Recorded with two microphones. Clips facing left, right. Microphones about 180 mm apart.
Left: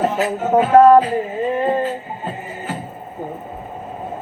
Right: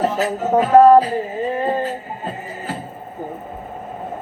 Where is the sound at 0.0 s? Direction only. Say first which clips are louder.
Left 1 dB; 35° right (ahead or behind).